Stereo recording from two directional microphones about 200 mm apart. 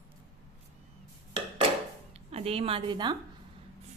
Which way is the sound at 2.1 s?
30° right (ahead or behind).